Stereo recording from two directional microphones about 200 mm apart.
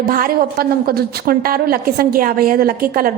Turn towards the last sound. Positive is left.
turn(degrees=-45)  # may be behind; listen again after turning